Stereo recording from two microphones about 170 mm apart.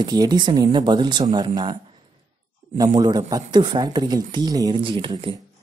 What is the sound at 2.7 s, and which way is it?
Speech, 20° right (ahead or behind).